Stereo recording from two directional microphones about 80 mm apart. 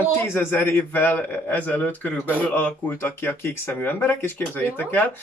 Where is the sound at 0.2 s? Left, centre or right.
Left.